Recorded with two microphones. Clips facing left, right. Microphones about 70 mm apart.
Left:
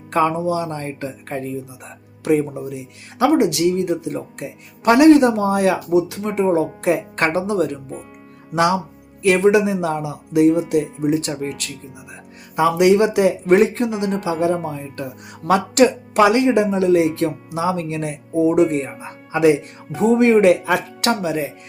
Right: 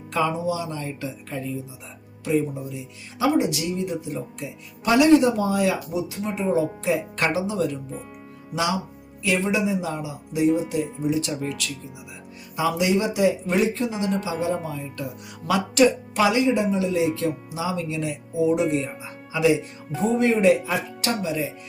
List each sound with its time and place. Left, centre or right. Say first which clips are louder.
0.1 s speech: left 6 dB; left
3.3 s speech: left 7 dB; left
6.0 s speech: left 8 dB; left
12.5 s speech: left 8 dB; left
14.4 s speech: left 6 dB; left
20.1 s speech: left 5 dB; left